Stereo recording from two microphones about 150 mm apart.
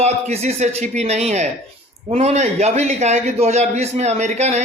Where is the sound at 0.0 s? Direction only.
50° right (ahead or behind).